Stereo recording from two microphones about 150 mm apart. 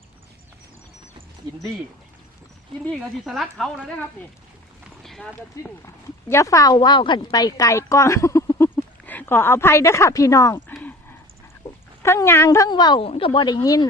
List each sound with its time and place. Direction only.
3.2 s a woman's voice: centre (ahead or behind)
5.8 s speech: 20° left (ahead or behind)
12.0 s a woman's voice: 15° left (ahead or behind)